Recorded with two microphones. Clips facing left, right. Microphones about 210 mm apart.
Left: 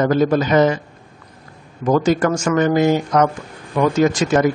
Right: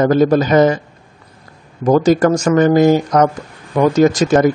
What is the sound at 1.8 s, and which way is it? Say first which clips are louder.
Speech: right 4 dB; 40° right (ahead or behind).